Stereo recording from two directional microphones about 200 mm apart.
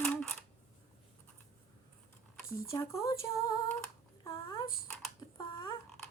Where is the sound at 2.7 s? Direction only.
15° left (ahead or behind).